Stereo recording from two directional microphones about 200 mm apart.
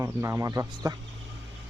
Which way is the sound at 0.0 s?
15° right (ahead or behind).